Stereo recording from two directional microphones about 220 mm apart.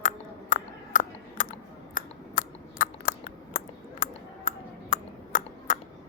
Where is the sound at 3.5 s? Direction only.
35° left (ahead or behind).